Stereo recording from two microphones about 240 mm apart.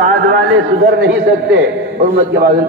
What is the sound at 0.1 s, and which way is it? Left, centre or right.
A man's voice, right.